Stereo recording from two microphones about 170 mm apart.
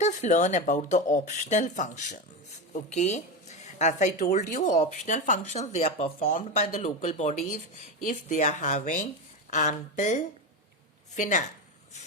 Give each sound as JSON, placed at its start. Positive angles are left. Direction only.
{"t": 0.0, "sound": "speech", "side_deg": 45}